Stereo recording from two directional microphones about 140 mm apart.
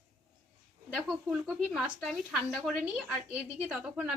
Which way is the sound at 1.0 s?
5° right (ahead or behind).